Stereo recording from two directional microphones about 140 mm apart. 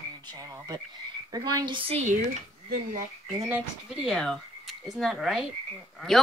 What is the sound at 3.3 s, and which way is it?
Speech, 15° right (ahead or behind).